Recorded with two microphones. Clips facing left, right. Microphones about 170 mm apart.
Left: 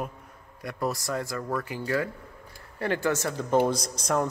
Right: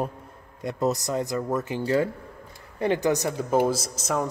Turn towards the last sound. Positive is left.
turn(degrees=0)  # may be behind; listen again after turning